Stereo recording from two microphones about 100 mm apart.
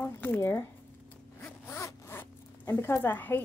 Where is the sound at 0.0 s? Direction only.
20° left (ahead or behind).